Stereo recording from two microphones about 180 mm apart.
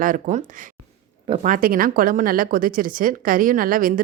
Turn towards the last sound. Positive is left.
turn(degrees=-50)  # may be behind; listen again after turning